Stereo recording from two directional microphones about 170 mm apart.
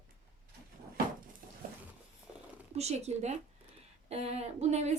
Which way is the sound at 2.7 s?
40° right (ahead or behind).